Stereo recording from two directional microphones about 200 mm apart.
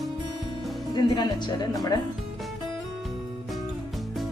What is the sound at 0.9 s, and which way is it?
Speech, 20° left (ahead or behind).